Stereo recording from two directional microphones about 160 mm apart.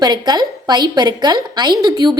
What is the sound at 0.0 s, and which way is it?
A woman's voice, 25° right (ahead or behind).